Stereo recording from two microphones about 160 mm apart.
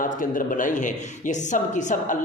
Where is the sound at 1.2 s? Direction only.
50° left (ahead or behind).